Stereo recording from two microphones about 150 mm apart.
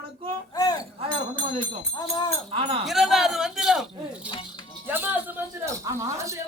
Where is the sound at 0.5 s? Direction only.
25° left (ahead or behind).